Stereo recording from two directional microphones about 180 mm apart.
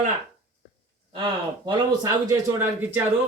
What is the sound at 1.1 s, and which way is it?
A man's voice, 25° right (ahead or behind).